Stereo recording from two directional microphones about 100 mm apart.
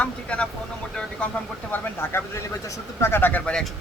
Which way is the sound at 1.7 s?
25° left (ahead or behind).